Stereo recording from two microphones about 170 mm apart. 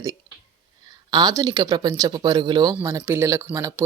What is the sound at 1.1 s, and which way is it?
Speech, 25° right (ahead or behind).